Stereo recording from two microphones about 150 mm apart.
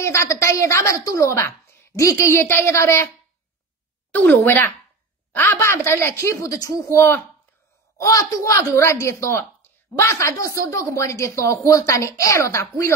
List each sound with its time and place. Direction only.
0.0 s a woman's voice: 20° left (ahead or behind)
4.1 s a woman's voice: 10° left (ahead or behind)